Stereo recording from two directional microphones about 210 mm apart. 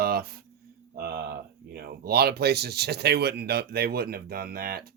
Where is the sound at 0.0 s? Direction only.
45° right (ahead or behind).